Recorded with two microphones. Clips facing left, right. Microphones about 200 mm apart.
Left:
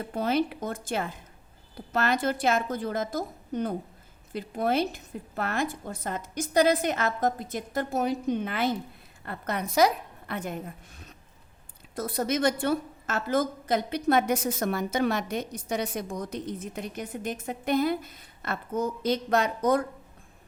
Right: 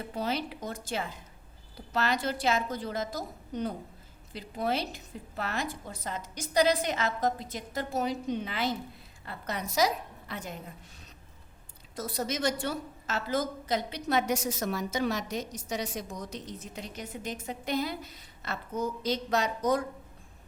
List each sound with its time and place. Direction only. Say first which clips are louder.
0.1 s a woman's voice: left 7 dB; 50° left (ahead or behind)